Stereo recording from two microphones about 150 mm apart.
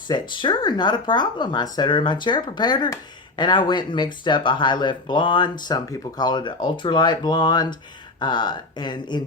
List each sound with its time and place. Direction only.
0.1 s speech: 30° left (ahead or behind)